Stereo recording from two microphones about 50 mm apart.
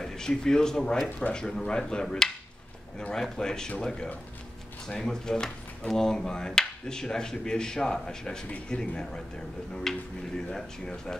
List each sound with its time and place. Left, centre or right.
0.0 s speech: centre